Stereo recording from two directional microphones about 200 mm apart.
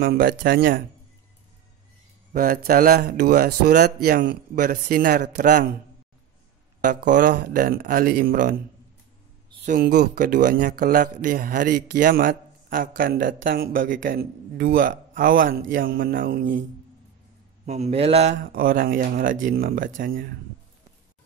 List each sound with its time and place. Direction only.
0.0 s speech: 45° right (ahead or behind)
2.3 s speech: 45° right (ahead or behind)
6.8 s speech: 40° right (ahead or behind)
9.7 s speech: 45° right (ahead or behind)
17.6 s speech: 35° right (ahead or behind)